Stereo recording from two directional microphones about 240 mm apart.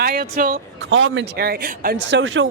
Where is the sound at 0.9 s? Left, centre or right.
Right.